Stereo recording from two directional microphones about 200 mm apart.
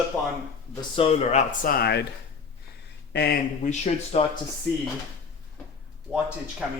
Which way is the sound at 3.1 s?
55° left (ahead or behind).